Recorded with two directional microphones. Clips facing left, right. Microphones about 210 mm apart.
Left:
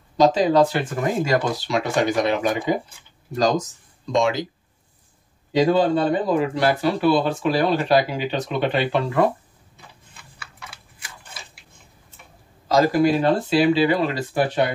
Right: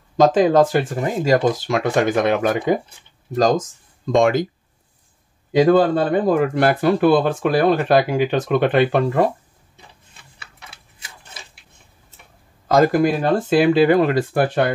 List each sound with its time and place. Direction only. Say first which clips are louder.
0.2 s speech: right 3 dB; 50° right (ahead or behind)
1.7 s speech: left 1 dB; 50° right (ahead or behind)
4.0 s speech: right 5 dB; 50° right (ahead or behind)
5.7 s speech: right 3 dB; 55° right (ahead or behind)
12.6 s speech: right 2 dB; 55° right (ahead or behind)